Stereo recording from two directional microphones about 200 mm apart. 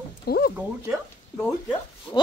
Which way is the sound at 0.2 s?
50° left (ahead or behind).